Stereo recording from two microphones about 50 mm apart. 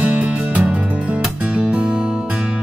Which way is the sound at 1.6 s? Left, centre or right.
Centre.